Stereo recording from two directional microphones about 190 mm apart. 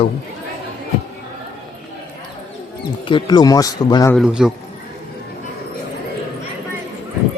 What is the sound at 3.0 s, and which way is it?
A man's voice, 25° left (ahead or behind).